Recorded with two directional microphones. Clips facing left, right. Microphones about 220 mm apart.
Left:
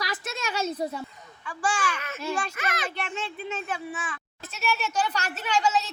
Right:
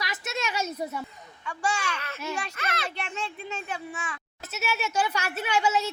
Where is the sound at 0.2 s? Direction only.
10° right (ahead or behind).